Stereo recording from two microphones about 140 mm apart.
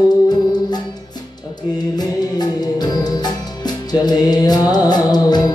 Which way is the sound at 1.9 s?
30° left (ahead or behind).